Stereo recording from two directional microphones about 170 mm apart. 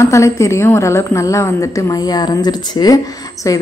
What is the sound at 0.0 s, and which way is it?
A woman's voice, 15° left (ahead or behind).